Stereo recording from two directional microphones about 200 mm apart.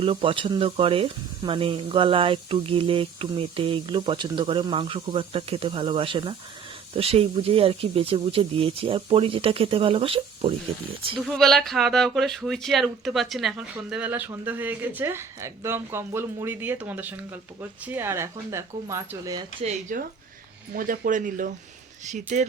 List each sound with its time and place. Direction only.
0.0 s speech: 25° right (ahead or behind)
11.3 s speech: centre (ahead or behind); by 19.6 s 20° right (ahead or behind)
19.6 s speech: 40° right (ahead or behind)